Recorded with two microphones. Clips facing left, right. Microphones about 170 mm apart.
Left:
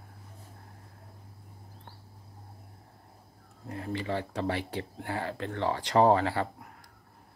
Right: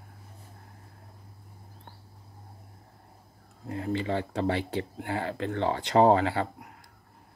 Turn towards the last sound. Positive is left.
turn(degrees=-25)  # may be behind; listen again after turning